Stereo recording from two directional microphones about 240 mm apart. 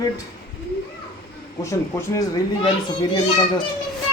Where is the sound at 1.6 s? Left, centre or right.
Centre.